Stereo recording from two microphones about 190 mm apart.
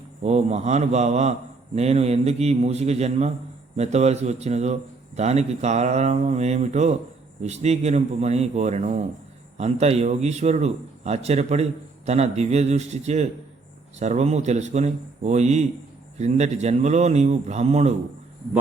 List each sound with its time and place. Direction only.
0.2 s a man's voice: 35° right (ahead or behind)